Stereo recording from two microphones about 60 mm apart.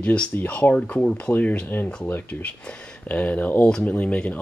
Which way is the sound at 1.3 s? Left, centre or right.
Left.